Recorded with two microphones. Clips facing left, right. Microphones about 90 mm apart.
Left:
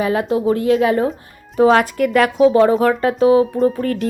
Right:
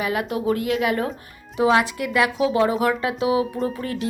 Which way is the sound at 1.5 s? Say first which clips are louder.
Left 6 dB; 40° left (ahead or behind).